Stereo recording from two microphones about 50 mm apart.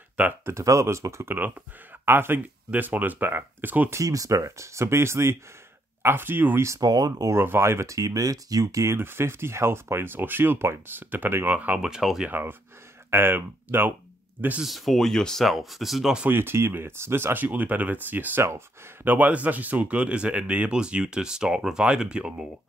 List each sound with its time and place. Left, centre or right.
0.5 s speech: right
2.0 s speech: right
3.9 s speech: right
6.0 s speech: right
7.3 s speech: right
8.7 s speech: right
11.4 s speech: right
11.8 s speech: centre
12.3 s speech: right
14.6 s speech: centre
15.4 s speech: centre
16.3 s speech: right; by 22.5 s centre